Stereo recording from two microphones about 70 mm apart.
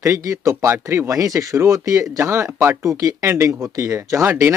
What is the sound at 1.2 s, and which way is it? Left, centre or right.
Speech, right.